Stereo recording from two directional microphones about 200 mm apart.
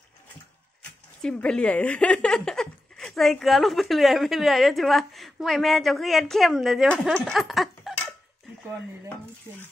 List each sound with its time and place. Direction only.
1.2 s speech: 5° left (ahead or behind)